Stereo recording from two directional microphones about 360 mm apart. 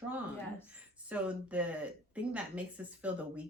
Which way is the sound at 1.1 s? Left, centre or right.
Centre.